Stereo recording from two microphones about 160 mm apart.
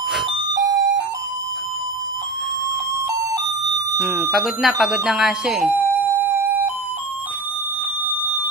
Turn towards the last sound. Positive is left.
turn(degrees=-10)  # may be behind; listen again after turning